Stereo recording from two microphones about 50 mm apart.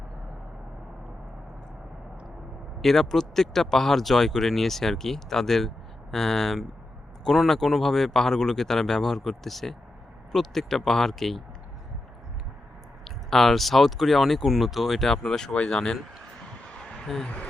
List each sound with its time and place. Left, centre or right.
2.8 s speech: centre
13.1 s speech: centre
15.5 s speech: left
17.2 s speech: left